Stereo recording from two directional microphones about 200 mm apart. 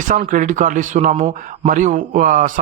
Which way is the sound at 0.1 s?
40° right (ahead or behind).